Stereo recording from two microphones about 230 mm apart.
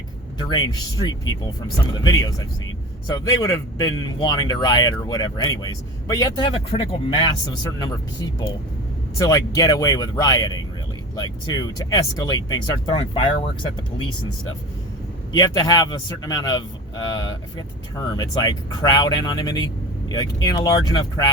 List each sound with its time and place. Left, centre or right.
0.5 s a man's voice: centre
15.3 s a man's voice: centre